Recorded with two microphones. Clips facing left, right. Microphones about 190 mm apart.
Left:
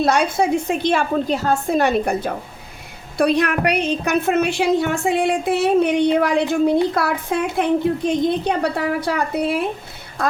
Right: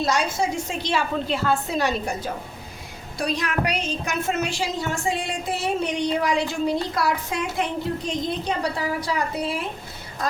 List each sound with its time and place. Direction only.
0.0 s a woman's voice: 60° left (ahead or behind)